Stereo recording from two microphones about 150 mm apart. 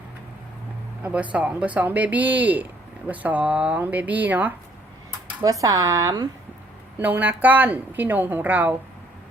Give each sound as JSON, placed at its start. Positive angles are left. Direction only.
{"t": 1.0, "sound": "a woman's voice", "side_deg": -10}
{"t": 5.4, "sound": "speech", "side_deg": -20}
{"t": 7.0, "sound": "a woman's voice", "side_deg": -10}